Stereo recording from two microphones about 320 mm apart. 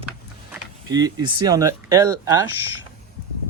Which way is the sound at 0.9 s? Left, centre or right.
Centre.